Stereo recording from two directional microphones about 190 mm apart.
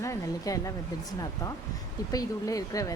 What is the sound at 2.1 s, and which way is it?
Speech, 20° left (ahead or behind).